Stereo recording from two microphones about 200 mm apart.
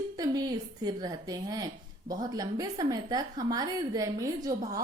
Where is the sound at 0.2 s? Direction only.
20° right (ahead or behind).